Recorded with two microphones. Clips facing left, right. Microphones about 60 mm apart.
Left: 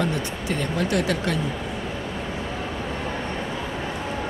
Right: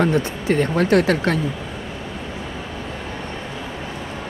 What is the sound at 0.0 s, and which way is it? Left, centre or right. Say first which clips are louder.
Speech: right 6 dB; right.